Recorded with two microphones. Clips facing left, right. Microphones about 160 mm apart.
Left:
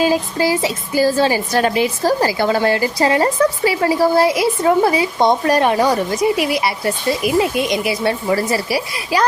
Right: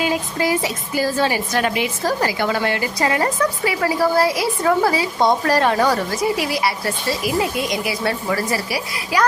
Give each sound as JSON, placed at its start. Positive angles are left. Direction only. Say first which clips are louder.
{"t": 0.0, "sound": "a woman's voice", "louder": "left 4 dB", "side_deg": 30}